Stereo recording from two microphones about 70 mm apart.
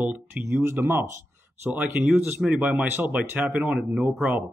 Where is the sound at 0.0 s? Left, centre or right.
Right.